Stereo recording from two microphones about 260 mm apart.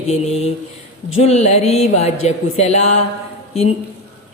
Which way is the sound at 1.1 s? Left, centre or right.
Left.